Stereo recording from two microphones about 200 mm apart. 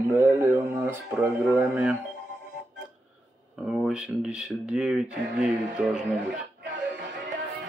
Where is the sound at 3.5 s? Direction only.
5° right (ahead or behind).